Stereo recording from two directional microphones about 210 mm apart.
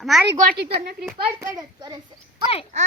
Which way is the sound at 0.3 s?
45° right (ahead or behind).